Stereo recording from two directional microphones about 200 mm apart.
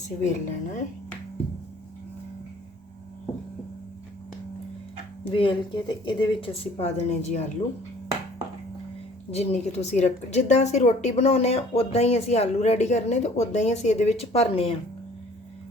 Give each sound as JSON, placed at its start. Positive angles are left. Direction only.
{"t": 0.2, "sound": "a woman's voice", "side_deg": 35}
{"t": 5.3, "sound": "speech", "side_deg": 25}
{"t": 9.3, "sound": "a woman's voice", "side_deg": 30}